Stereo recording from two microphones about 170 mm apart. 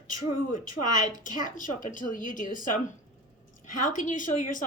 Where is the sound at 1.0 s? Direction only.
50° left (ahead or behind).